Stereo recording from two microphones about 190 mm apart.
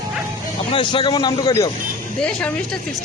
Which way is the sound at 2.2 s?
5° left (ahead or behind).